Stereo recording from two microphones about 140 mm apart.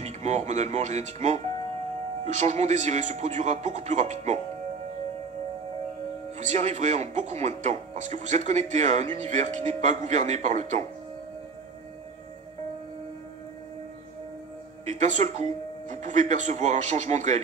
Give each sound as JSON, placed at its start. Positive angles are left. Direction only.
{"t": 0.0, "sound": "speech", "side_deg": -50}
{"t": 6.3, "sound": "speech", "side_deg": -55}
{"t": 14.9, "sound": "speech", "side_deg": -60}